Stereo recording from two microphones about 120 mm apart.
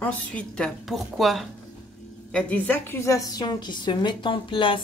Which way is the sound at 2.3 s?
15° left (ahead or behind).